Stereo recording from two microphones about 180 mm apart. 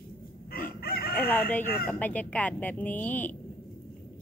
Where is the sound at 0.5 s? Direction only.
55° left (ahead or behind).